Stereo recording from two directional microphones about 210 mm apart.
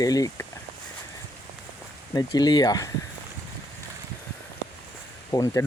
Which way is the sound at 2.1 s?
20° left (ahead or behind).